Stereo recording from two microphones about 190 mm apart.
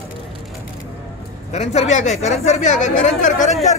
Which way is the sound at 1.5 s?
35° left (ahead or behind).